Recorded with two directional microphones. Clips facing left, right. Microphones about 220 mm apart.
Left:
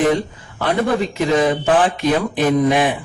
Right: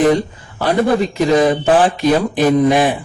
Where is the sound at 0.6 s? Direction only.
35° right (ahead or behind).